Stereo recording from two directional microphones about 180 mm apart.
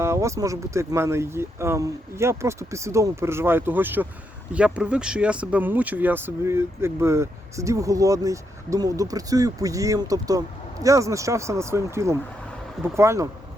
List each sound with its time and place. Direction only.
0.0 s speech: 15° right (ahead or behind)